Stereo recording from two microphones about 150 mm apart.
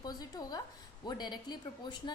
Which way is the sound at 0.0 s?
25° left (ahead or behind).